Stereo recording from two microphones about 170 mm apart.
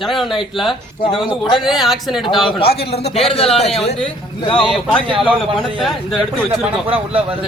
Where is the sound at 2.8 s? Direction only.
35° left (ahead or behind).